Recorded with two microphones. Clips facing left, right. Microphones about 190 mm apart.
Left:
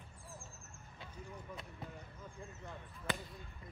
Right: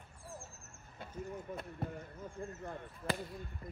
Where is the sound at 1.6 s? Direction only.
55° right (ahead or behind).